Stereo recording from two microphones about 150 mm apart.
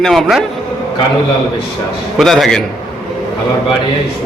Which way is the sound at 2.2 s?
Centre (ahead or behind).